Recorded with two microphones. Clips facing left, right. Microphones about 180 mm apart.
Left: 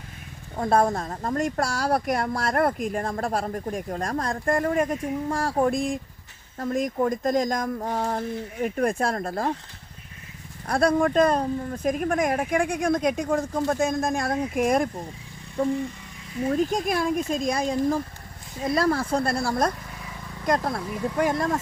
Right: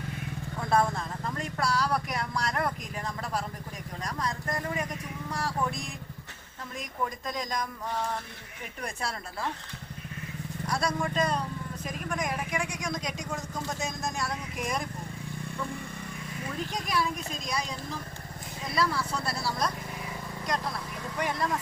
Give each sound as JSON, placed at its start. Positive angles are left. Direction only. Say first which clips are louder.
{"t": 0.5, "sound": "speech", "louder": "left 5 dB", "side_deg": 40}
{"t": 10.7, "sound": "speech", "louder": "left 10 dB", "side_deg": 55}
{"t": 16.5, "sound": "speech", "louder": "left 10 dB", "side_deg": 45}